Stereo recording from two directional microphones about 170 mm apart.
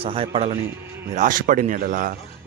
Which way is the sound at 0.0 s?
35° right (ahead or behind).